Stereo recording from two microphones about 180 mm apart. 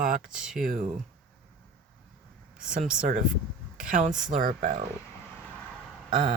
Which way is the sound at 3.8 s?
45° right (ahead or behind).